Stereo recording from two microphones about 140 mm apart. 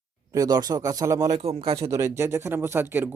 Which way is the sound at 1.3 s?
45° right (ahead or behind).